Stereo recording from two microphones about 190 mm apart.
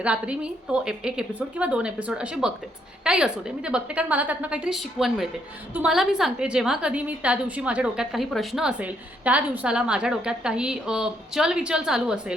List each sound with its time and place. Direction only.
0.0 s a woman's voice: 5° right (ahead or behind)